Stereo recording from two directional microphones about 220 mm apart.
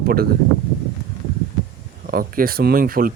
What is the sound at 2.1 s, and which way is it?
Speech, 40° right (ahead or behind).